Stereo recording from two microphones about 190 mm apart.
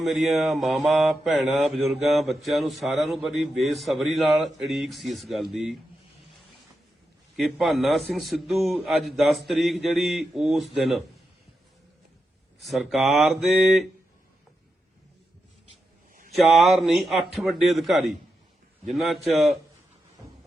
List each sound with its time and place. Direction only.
0.0 s mantra: centre (ahead or behind)
7.3 s mantra: centre (ahead or behind)
12.6 s mantra: centre (ahead or behind)
15.7 s a sound: 45° right (ahead or behind)
16.3 s mantra: centre (ahead or behind)